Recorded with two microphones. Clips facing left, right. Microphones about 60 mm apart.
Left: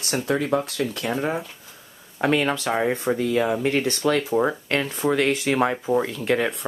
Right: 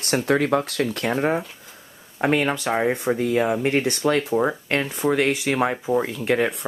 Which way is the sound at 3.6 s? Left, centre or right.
Right.